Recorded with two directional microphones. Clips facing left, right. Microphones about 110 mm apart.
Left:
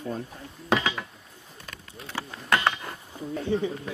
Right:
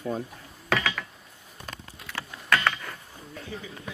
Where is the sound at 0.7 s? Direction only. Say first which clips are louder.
Left 2 dB; 20° left (ahead or behind).